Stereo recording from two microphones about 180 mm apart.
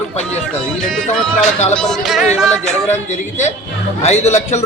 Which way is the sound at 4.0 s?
40° left (ahead or behind).